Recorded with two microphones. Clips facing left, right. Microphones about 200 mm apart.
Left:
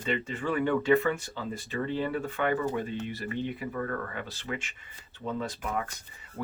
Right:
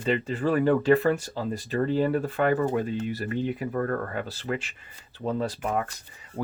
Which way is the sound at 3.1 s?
40° right (ahead or behind).